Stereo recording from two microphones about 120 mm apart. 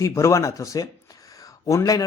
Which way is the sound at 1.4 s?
30° left (ahead or behind).